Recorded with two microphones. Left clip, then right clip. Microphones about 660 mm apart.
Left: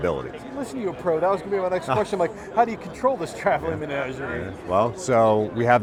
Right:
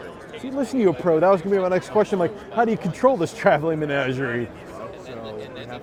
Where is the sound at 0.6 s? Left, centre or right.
Right.